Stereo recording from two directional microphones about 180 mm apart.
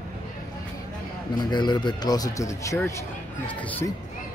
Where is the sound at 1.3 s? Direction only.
25° left (ahead or behind).